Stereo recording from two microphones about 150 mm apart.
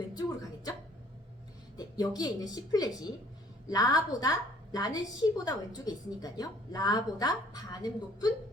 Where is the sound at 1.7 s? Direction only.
25° left (ahead or behind).